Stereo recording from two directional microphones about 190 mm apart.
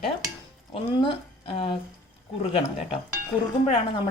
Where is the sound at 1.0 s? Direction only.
25° left (ahead or behind).